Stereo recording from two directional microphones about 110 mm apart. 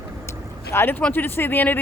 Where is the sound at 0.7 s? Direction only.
20° left (ahead or behind).